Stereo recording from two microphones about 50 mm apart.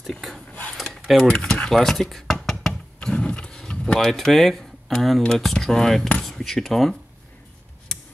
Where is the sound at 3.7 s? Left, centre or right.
Left.